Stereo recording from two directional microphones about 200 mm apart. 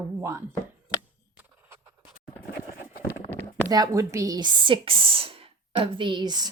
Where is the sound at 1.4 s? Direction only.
10° right (ahead or behind).